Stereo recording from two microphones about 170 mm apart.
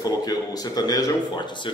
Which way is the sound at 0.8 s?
20° left (ahead or behind).